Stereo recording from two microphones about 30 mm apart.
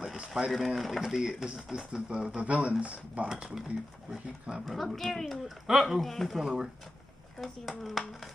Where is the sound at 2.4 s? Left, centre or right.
Right.